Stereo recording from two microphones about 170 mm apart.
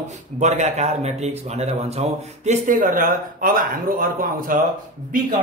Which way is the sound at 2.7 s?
55° right (ahead or behind).